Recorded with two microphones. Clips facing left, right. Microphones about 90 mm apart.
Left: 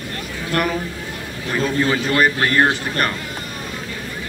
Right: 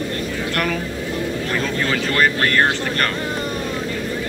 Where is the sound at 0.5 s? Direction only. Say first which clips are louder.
Left 4 dB; 20° left (ahead or behind).